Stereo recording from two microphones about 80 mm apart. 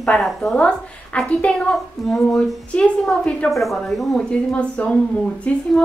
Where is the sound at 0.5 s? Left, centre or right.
Centre.